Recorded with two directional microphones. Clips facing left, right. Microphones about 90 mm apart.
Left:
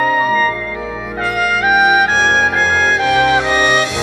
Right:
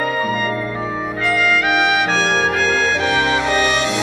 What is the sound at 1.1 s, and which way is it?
Music, 40° left (ahead or behind).